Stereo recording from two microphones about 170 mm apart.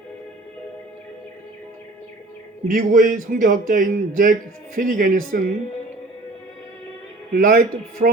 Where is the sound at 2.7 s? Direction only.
55° right (ahead or behind).